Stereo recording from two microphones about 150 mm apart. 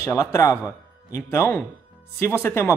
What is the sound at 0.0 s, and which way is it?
Speech, 20° left (ahead or behind).